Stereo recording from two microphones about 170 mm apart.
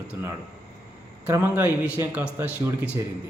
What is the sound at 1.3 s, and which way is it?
A man's voice, 15° right (ahead or behind).